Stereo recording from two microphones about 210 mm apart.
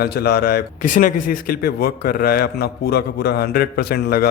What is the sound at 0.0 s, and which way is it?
A man's voice, 50° left (ahead or behind).